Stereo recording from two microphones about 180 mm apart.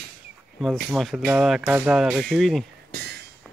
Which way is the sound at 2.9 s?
65° right (ahead or behind).